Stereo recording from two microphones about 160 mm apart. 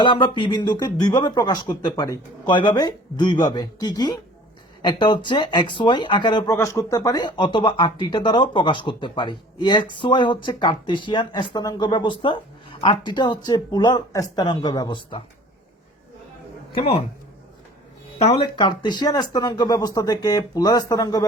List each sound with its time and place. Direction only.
0.0 s speech: 30° left (ahead or behind)
16.7 s speech: 35° left (ahead or behind)
18.3 s speech: 30° left (ahead or behind)